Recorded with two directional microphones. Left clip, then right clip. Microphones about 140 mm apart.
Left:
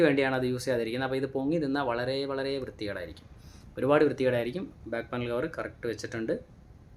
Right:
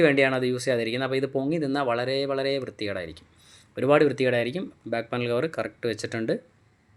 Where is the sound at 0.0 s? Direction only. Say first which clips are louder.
Right 4 dB; 15° right (ahead or behind).